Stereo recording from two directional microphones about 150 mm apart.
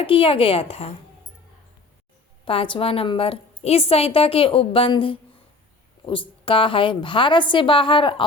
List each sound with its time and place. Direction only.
0.0 s a woman's voice: 35° left (ahead or behind)
2.4 s a woman's voice: 35° left (ahead or behind)